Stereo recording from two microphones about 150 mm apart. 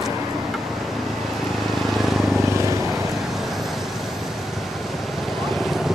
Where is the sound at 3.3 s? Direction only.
Centre (ahead or behind).